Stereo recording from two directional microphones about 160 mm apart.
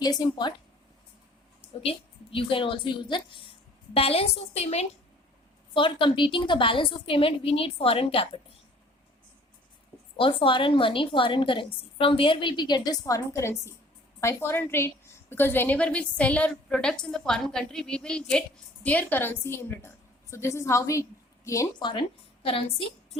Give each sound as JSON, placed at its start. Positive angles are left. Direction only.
{"t": 0.0, "sound": "speech", "side_deg": 25}
{"t": 1.8, "sound": "a woman's voice", "side_deg": 35}
{"t": 10.2, "sound": "a woman's voice", "side_deg": 35}